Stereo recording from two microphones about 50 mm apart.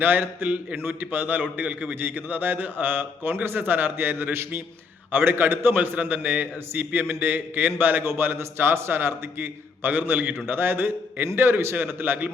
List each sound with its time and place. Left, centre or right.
0.0 s a man's voice: right
0.8 s a man's voice: right